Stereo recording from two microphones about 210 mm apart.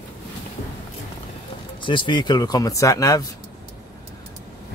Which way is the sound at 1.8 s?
25° left (ahead or behind).